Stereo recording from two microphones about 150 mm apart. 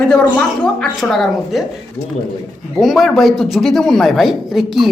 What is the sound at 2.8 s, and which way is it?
Speech, centre (ahead or behind).